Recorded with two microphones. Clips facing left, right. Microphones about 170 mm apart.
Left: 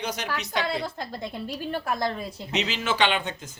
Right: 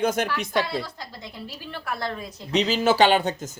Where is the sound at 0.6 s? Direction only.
55° left (ahead or behind).